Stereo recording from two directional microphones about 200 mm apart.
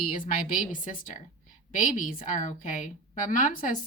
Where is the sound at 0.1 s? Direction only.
40° left (ahead or behind).